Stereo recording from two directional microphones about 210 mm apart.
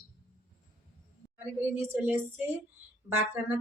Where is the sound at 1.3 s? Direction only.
10° right (ahead or behind).